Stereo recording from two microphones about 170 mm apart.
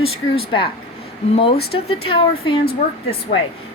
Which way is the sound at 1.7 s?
30° left (ahead or behind).